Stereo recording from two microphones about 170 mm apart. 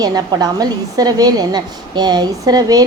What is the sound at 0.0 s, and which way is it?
A woman's voice, 20° right (ahead or behind).